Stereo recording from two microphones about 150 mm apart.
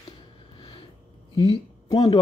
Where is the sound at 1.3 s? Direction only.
30° left (ahead or behind).